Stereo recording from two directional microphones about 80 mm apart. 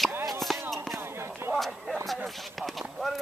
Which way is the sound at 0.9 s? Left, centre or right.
Right.